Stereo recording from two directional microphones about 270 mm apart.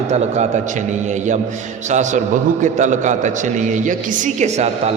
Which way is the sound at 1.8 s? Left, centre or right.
Right.